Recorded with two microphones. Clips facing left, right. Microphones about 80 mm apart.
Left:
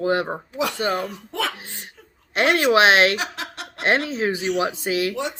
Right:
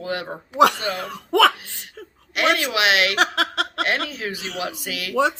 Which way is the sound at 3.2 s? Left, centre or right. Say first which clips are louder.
Right 9 dB; right.